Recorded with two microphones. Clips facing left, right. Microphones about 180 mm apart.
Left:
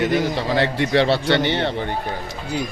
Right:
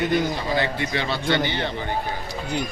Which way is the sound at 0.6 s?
70° left (ahead or behind).